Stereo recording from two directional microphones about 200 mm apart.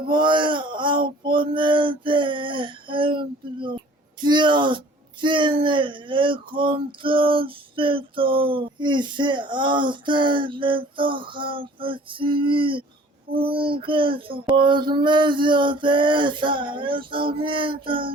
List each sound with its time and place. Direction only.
0.1 s speech: 25° right (ahead or behind)